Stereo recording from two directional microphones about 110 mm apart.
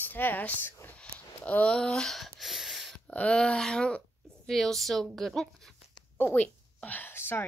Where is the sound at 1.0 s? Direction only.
15° left (ahead or behind).